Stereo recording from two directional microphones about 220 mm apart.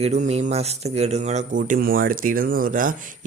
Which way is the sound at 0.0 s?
30° right (ahead or behind).